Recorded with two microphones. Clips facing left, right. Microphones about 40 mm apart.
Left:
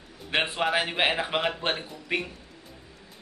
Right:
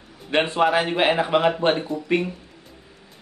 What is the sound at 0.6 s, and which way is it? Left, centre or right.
Speech, centre.